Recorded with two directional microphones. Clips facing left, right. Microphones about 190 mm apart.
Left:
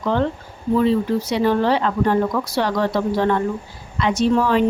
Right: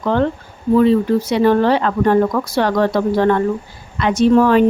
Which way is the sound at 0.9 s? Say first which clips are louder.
Right 4 dB; 55° right (ahead or behind).